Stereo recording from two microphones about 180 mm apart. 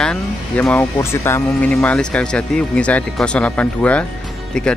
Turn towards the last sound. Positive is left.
turn(degrees=5)  # may be behind; listen again after turning